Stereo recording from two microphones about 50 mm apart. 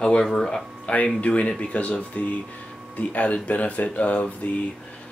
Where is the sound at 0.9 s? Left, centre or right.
Left.